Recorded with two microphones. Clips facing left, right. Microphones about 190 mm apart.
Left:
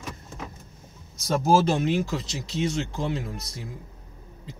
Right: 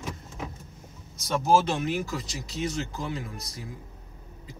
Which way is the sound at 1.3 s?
30° left (ahead or behind).